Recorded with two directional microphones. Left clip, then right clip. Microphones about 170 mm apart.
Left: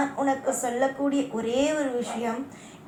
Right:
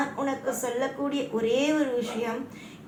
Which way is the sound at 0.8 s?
30° right (ahead or behind).